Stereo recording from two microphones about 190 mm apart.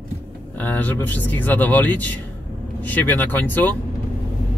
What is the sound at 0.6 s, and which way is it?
Speech, 10° left (ahead or behind).